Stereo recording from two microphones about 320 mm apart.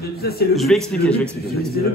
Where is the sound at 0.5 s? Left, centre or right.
Centre.